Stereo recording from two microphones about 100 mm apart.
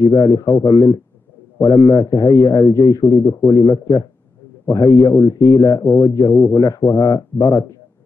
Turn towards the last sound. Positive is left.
turn(degrees=35)  # may be behind; listen again after turning